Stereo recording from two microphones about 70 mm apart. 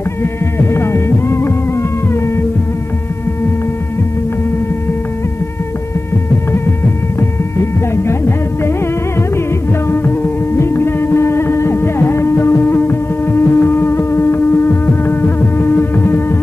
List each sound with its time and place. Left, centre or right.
0.2 s music: left
10.6 s music: left